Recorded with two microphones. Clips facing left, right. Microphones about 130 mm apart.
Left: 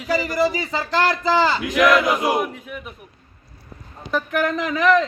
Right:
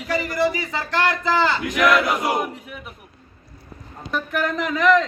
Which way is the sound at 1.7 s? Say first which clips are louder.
Left 3 dB; centre (ahead or behind).